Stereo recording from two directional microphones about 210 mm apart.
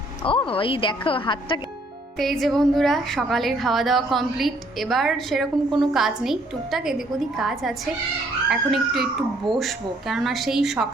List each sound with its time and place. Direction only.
0.2 s a woman's voice: 25° left (ahead or behind)
2.1 s a woman's voice: centre (ahead or behind)